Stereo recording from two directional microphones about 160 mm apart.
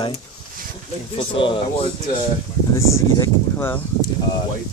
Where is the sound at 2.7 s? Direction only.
15° left (ahead or behind).